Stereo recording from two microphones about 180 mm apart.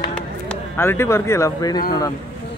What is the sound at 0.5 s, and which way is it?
Speech, 15° left (ahead or behind).